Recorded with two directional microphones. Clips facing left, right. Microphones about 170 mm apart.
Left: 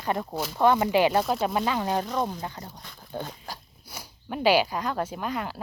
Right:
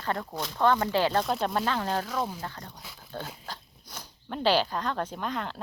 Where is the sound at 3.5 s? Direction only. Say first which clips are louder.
Left 2 dB; 10° left (ahead or behind).